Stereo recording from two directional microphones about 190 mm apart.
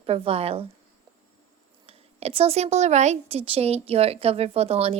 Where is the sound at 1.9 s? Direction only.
30° right (ahead or behind).